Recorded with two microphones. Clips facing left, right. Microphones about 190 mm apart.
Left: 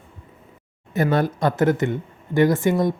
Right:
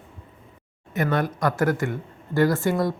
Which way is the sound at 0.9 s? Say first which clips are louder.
Left 4 dB; 30° left (ahead or behind).